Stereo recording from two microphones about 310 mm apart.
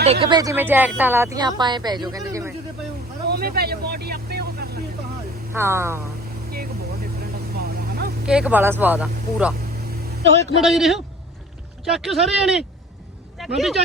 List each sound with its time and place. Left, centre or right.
0.0 s speech: centre
3.2 s vehicle: right
5.5 s speech: centre
6.5 s vehicle: right
8.3 s speech: centre
10.6 s speech: centre